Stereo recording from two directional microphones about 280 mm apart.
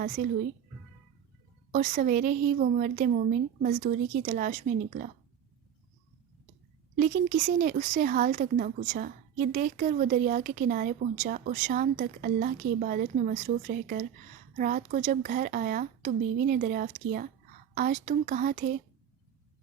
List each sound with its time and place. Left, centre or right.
1.7 s speech: right
6.9 s speech: right